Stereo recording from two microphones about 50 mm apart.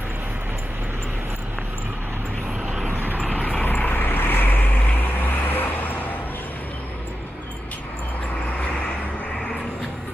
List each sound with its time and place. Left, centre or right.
2.9 s vehicle: right
3.2 s vehicle: left
3.6 s vehicle: left